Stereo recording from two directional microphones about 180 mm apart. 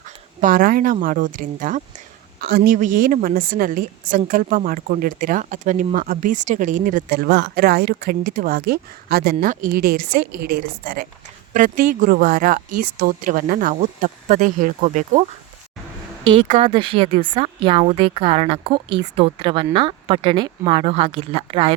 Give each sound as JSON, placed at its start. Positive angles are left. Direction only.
{"t": 0.4, "sound": "a woman's voice", "side_deg": -50}
{"t": 2.4, "sound": "a woman's voice", "side_deg": -60}
{"t": 2.7, "sound": "a woman's voice", "side_deg": -45}
{"t": 16.2, "sound": "a woman's voice", "side_deg": -30}